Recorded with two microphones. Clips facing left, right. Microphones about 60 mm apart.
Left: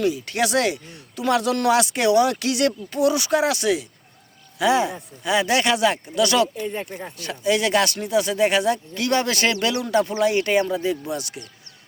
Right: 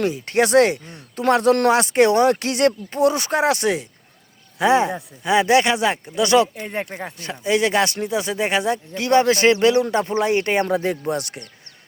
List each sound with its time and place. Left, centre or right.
0.0 s speech: right
6.6 s speech: right
7.2 s speech: right
10.7 s speech: right